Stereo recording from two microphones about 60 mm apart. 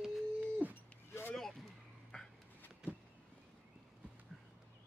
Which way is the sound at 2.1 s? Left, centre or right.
Centre.